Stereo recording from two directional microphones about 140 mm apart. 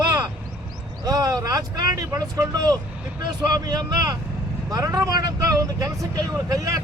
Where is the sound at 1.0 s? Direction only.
25° right (ahead or behind).